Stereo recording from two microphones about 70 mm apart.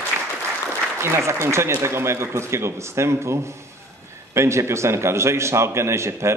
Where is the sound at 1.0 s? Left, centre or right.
Right.